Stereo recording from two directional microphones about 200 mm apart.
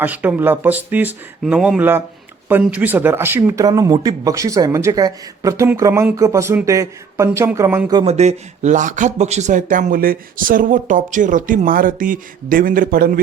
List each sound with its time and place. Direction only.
0.0 s speech: 10° right (ahead or behind)
7.9 s speech: 35° right (ahead or behind)